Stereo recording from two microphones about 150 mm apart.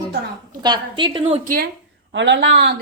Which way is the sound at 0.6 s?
30° right (ahead or behind).